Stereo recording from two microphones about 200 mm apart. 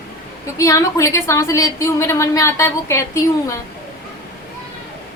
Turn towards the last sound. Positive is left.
turn(degrees=15)  # may be behind; listen again after turning